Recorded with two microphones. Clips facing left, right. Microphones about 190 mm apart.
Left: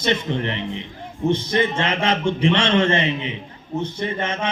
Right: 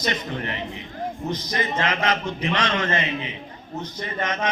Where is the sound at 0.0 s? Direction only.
25° left (ahead or behind).